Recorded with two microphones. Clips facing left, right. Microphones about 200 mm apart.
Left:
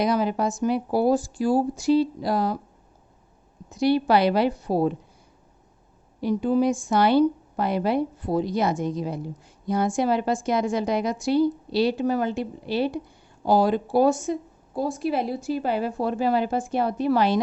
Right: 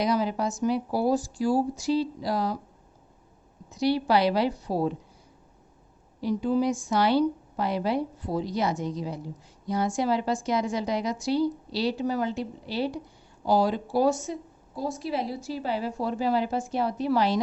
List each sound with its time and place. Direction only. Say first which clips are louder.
0.0 s a woman's voice: left 3 dB; 55° left (ahead or behind)
3.7 s a woman's voice: left 4 dB; 55° left (ahead or behind)
6.2 s a woman's voice: left 3 dB; 55° left (ahead or behind)